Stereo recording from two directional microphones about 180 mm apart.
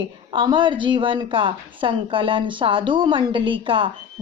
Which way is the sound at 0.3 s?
25° right (ahead or behind).